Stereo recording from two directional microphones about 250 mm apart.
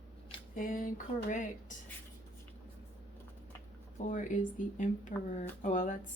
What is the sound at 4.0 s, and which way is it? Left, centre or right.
Speech, left.